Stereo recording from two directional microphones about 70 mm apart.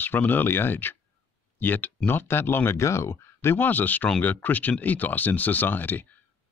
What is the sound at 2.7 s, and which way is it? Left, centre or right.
Speech, left.